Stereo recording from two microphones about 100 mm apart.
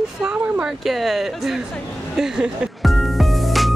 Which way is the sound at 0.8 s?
Centre (ahead or behind).